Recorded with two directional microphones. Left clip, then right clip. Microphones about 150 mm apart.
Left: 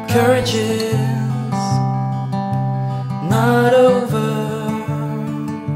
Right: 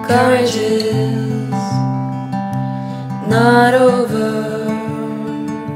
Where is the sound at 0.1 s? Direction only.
65° left (ahead or behind).